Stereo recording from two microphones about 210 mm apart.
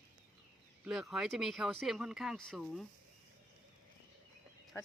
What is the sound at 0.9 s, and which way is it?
Speech, centre (ahead or behind).